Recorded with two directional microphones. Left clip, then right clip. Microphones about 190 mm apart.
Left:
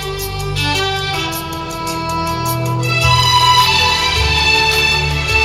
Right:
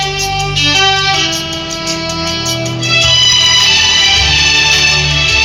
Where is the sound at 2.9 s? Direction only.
50° left (ahead or behind).